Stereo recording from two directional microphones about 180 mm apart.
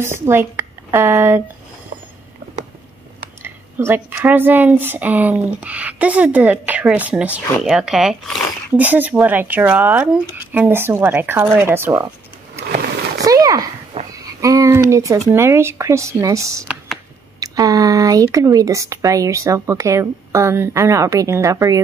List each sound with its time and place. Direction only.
0.0 s speech: 15° right (ahead or behind)
3.4 s speech: 10° right (ahead or behind)
13.2 s a sound: 20° right (ahead or behind)
14.1 s speech: 20° right (ahead or behind)